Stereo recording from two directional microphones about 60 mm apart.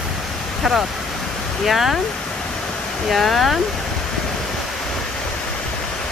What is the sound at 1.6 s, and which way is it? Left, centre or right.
Speech, centre.